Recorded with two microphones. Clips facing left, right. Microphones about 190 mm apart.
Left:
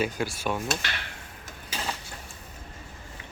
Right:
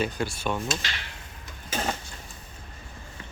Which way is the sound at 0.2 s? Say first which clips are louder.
Even; 10° left (ahead or behind).